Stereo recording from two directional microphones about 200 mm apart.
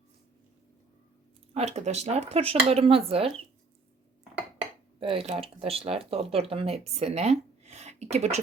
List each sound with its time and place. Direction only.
1.5 s speech: 35° right (ahead or behind)
4.9 s speech: 25° right (ahead or behind)